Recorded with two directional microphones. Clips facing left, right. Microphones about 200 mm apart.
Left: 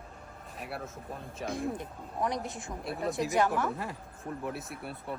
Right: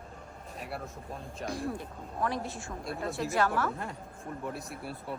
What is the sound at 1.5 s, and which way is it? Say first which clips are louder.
A man's voice: left 2 dB; 20° left (ahead or behind).